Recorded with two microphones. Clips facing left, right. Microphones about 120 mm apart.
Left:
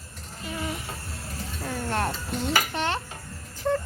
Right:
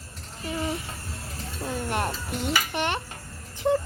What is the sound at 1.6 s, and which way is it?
Dishes, 15° right (ahead or behind).